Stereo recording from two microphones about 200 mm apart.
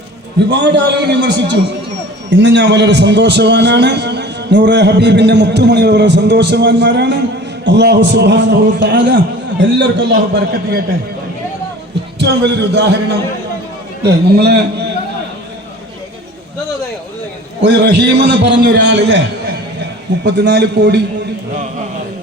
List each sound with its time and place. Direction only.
0.5 s a man's voice: 60° right (ahead or behind)
12.2 s a man's voice: 60° right (ahead or behind)
17.6 s a man's voice: 60° right (ahead or behind)